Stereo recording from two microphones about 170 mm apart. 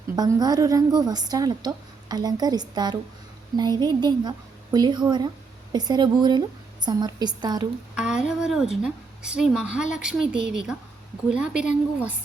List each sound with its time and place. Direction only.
0.2 s a woman's voice: 25° right (ahead or behind)
7.9 s a woman's voice: 5° right (ahead or behind)